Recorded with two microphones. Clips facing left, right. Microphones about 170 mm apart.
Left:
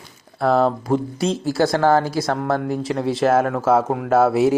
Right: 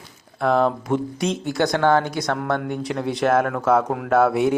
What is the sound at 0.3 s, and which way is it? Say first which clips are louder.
Speech: left 2 dB; 5° left (ahead or behind).